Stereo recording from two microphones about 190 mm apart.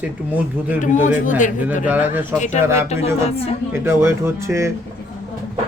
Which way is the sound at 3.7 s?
15° right (ahead or behind).